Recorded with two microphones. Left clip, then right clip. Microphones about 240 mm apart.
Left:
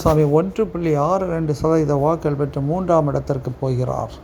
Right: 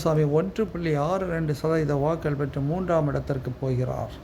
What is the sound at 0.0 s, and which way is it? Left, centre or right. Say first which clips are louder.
A man's voice: left 7 dB; centre.